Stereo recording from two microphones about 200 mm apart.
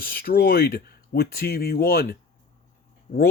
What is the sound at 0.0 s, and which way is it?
Speech, 50° left (ahead or behind).